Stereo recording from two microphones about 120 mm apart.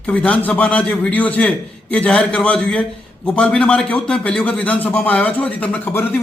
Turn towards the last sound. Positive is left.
turn(degrees=15)  # may be behind; listen again after turning